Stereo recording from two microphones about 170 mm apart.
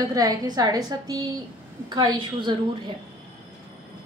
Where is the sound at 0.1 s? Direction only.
20° right (ahead or behind).